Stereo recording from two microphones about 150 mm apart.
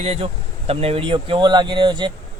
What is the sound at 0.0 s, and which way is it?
Speech, 45° right (ahead or behind).